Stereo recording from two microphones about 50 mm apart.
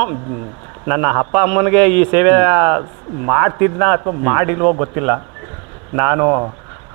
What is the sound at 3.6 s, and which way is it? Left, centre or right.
Speech, centre.